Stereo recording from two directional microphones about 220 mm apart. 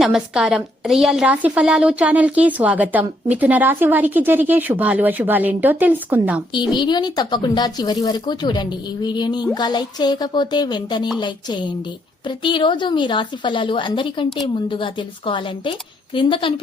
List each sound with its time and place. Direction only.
0.0 s a woman's voice: 5° right (ahead or behind)
6.5 s a woman's voice: 20° left (ahead or behind)